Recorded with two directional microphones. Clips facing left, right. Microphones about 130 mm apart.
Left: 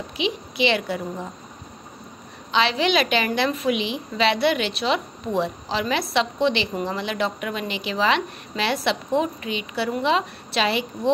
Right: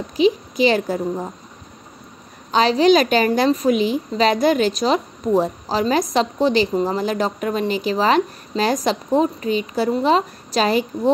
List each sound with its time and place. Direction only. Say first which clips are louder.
0.2 s a woman's voice: right 8 dB; 40° right (ahead or behind)
2.5 s a woman's voice: right 7 dB; 40° right (ahead or behind)